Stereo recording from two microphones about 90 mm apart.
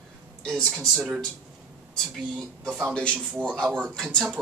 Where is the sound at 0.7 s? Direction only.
10° right (ahead or behind).